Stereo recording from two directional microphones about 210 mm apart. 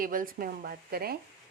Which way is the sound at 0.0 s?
40° right (ahead or behind).